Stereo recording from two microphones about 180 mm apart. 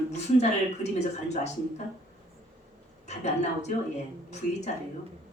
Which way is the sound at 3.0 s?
40° left (ahead or behind).